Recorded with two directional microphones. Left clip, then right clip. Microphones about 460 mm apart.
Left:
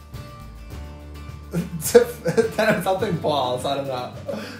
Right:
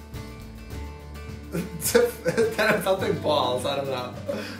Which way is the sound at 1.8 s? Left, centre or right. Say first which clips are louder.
Left 5 dB; centre.